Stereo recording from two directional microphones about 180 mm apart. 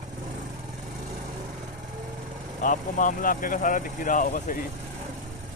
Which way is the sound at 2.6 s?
45° left (ahead or behind).